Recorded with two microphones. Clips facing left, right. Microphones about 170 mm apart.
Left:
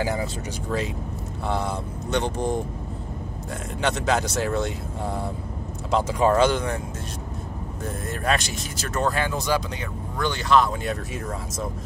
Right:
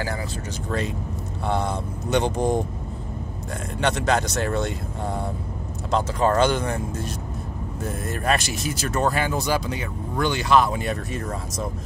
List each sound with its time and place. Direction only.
0.0 s speech: 20° left (ahead or behind)
0.7 s speech: 5° left (ahead or behind)
2.0 s speech: 10° right (ahead or behind)
3.8 s speech: centre (ahead or behind)
8.1 s speech: 5° right (ahead or behind)